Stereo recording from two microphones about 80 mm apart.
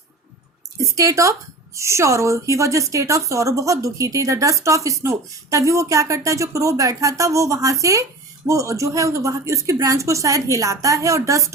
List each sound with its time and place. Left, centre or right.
0.8 s speech: right